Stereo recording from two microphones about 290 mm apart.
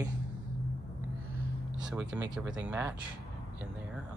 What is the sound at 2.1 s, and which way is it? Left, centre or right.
Speech, centre.